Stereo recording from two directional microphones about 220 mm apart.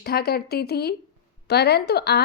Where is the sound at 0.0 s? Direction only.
45° left (ahead or behind).